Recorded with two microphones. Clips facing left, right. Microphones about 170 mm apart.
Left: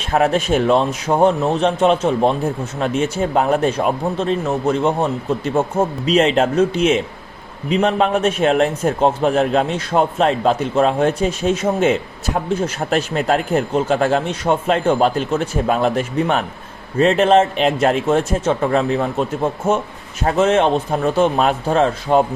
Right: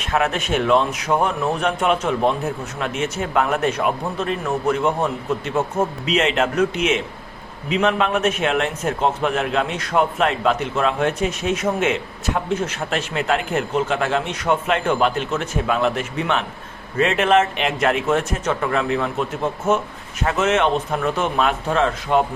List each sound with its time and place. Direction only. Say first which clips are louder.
0.0 s a man's voice: left 5 dB; 35° left (ahead or behind)
20.2 s a man's voice: left 4 dB; 35° left (ahead or behind)